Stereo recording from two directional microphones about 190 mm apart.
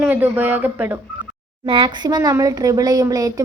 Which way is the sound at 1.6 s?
25° right (ahead or behind).